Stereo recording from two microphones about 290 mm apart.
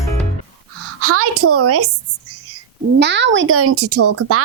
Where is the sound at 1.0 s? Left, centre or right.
Right.